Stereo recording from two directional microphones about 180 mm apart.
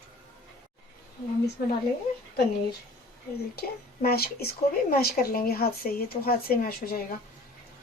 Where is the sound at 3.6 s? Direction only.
60° left (ahead or behind).